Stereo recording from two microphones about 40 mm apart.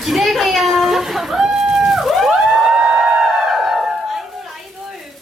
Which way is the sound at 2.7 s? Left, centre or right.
Right.